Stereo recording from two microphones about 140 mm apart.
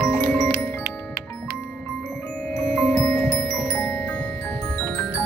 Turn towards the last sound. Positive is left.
turn(degrees=15)  # may be behind; listen again after turning